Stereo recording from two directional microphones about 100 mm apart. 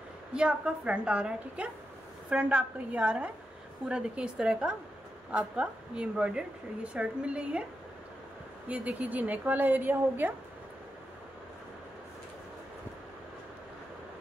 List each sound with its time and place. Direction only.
0.3 s speech: 10° right (ahead or behind)
8.6 s speech: 15° right (ahead or behind)